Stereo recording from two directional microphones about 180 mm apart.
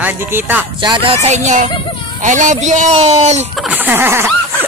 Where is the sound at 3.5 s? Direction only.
10° right (ahead or behind).